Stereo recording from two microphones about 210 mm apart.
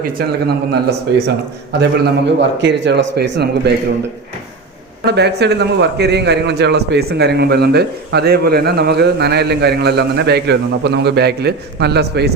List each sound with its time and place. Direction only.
0.0 s a man's voice: 50° right (ahead or behind)
5.0 s a man's voice: 50° right (ahead or behind)